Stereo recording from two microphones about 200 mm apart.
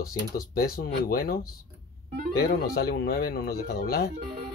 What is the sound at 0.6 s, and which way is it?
Speech, 50° left (ahead or behind).